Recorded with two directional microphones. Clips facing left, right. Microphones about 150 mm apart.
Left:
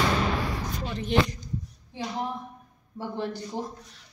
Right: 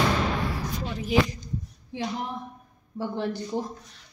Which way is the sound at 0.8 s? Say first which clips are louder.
Even; 5° right (ahead or behind).